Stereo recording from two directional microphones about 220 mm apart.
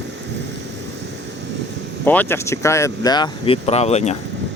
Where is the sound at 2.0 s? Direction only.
10° left (ahead or behind); by 4.2 s 30° left (ahead or behind).